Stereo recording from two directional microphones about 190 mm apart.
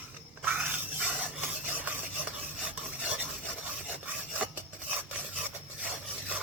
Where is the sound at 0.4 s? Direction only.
10° right (ahead or behind).